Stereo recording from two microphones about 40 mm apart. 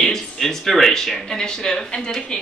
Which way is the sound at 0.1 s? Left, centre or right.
Centre.